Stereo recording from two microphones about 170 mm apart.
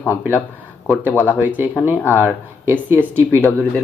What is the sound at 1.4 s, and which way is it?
Speech, 10° right (ahead or behind).